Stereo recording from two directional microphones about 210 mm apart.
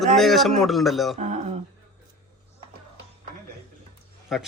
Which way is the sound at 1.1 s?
35° right (ahead or behind).